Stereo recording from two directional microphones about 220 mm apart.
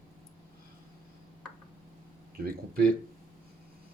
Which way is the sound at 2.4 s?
45° right (ahead or behind).